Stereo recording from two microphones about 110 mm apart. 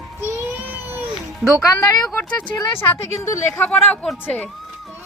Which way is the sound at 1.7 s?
30° left (ahead or behind).